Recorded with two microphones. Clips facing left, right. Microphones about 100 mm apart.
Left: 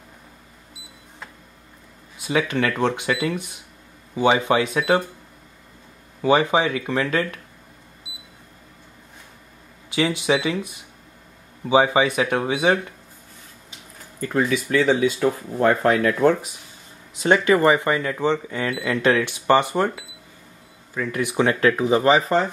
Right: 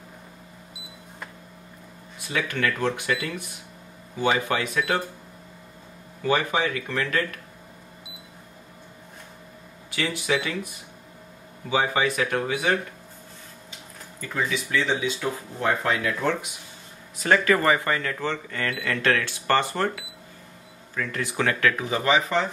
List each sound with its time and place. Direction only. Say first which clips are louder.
2.1 s speech: left 6 dB; 20° left (ahead or behind)
6.2 s speech: left 6 dB; 20° left (ahead or behind)
9.9 s speech: left 5 dB; 20° left (ahead or behind)
11.7 s speech: left 6 dB; 20° left (ahead or behind)
14.2 s speech: left 6 dB; 50° left (ahead or behind)
17.2 s speech: left 4 dB; 25° left (ahead or behind)
21.5 s speech: left 6 dB; 30° left (ahead or behind)